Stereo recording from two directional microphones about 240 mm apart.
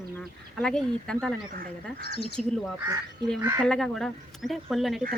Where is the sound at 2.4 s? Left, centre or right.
Centre.